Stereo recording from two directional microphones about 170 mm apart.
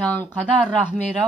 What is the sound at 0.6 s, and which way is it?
Speech, 5° left (ahead or behind).